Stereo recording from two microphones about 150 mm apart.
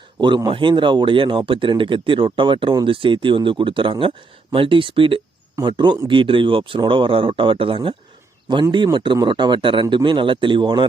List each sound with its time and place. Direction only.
0.2 s a man's voice: 30° right (ahead or behind)